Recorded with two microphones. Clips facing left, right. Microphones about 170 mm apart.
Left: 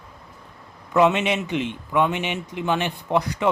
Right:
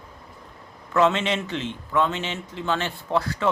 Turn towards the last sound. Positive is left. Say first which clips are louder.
# left 2 dB
turn(degrees=15)  # may be behind; listen again after turning